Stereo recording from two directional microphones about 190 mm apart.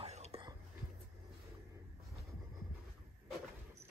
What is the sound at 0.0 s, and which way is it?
Whispering, 35° right (ahead or behind).